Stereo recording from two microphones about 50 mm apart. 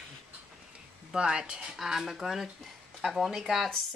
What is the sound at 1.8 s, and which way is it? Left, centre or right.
Speech, centre.